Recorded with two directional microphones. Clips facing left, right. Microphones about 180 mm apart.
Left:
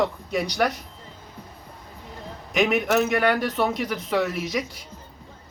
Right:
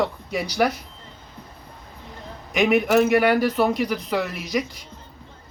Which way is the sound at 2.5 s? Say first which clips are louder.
Right 3 dB; centre (ahead or behind).